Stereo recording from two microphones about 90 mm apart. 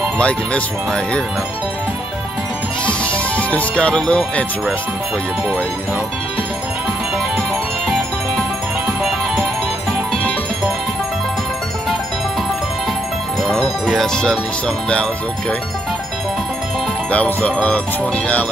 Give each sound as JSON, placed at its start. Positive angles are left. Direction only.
{"t": 0.2, "sound": "music", "side_deg": 15}
{"t": 2.8, "sound": "music", "side_deg": 15}
{"t": 9.0, "sound": "music", "side_deg": 0}
{"t": 13.5, "sound": "speech", "side_deg": 0}
{"t": 17.1, "sound": "music", "side_deg": 15}